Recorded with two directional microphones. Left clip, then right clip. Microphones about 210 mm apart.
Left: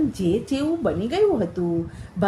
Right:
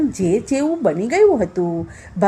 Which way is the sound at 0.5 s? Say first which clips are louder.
Right 5 dB; 30° right (ahead or behind).